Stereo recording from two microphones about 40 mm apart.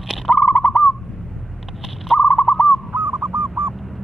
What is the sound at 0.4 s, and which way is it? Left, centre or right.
Owl, left.